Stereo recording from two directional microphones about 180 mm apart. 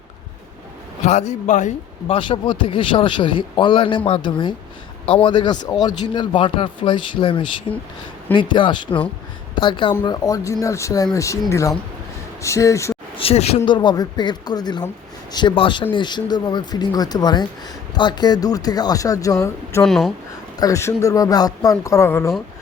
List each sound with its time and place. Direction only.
1.0 s a man's voice: 40° left (ahead or behind)
2.1 s a man's voice: 30° left (ahead or behind)
13.1 s speech: 35° left (ahead or behind)
13.7 s a man's voice: 25° left (ahead or behind)
19.8 s speech: centre (ahead or behind)
20.6 s a man's voice: 20° left (ahead or behind)